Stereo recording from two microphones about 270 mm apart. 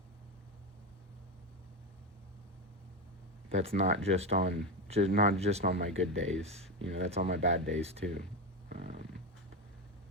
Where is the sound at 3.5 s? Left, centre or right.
Right.